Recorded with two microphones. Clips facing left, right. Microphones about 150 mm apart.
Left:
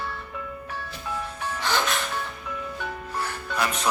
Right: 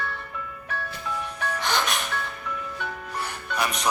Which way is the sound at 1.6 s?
15° right (ahead or behind).